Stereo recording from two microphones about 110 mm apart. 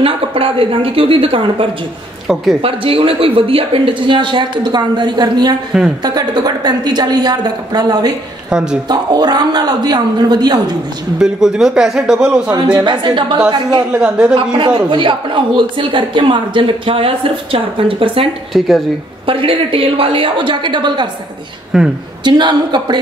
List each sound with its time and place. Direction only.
0.0 s a woman's voice: 55° right (ahead or behind); by 8.1 s 40° right (ahead or behind)
8.5 s speech: 5° right (ahead or behind)
8.8 s a woman's voice: 40° right (ahead or behind)
11.1 s a man's voice: 5° right (ahead or behind)
12.7 s a man's voice: 45° right (ahead or behind)
13.9 s a woman's voice: 10° right (ahead or behind)
14.3 s a man's voice: 45° right (ahead or behind)
21.7 s a man's voice: centre (ahead or behind)
22.2 s a man's voice: 45° right (ahead or behind)